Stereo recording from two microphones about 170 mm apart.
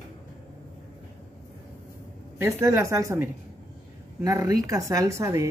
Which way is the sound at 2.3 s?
15° right (ahead or behind).